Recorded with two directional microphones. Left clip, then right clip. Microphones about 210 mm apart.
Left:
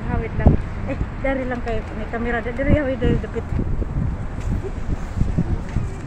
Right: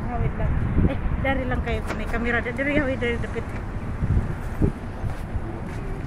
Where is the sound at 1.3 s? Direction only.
25° left (ahead or behind).